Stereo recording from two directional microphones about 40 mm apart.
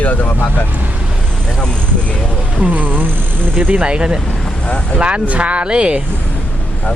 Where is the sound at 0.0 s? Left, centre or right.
Left.